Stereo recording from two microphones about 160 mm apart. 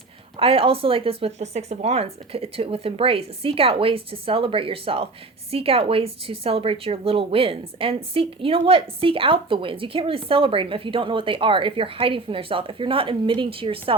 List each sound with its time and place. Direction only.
0.3 s a woman's voice: 35° right (ahead or behind)